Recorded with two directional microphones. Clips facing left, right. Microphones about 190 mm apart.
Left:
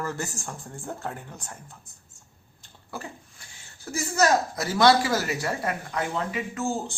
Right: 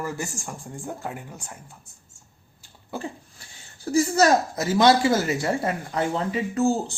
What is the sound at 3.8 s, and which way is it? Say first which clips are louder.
Speech: right 5 dB; 30° right (ahead or behind).